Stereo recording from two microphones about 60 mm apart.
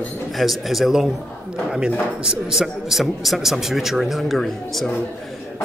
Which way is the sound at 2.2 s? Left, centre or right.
Centre.